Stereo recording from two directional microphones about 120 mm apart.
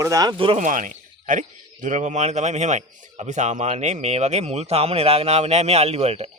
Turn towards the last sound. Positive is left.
turn(degrees=-60)  # may be behind; listen again after turning